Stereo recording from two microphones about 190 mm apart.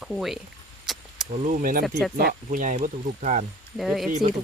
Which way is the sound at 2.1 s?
45° right (ahead or behind).